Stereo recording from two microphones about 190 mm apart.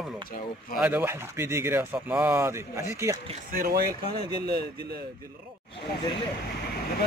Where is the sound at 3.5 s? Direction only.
50° right (ahead or behind).